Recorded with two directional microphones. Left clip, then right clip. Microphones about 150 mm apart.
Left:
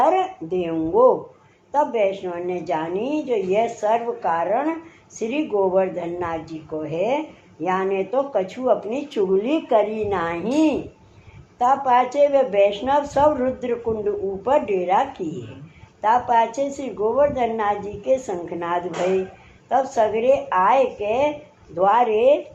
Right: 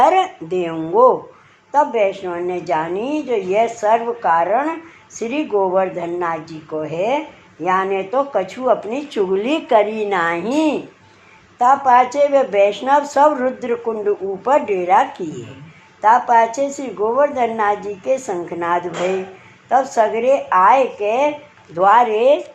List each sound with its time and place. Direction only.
0.0 s speech: 30° right (ahead or behind)